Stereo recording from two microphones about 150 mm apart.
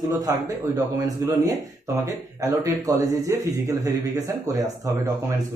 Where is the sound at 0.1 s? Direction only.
25° right (ahead or behind).